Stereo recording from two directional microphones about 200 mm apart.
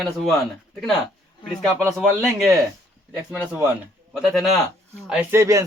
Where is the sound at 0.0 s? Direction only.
Centre (ahead or behind).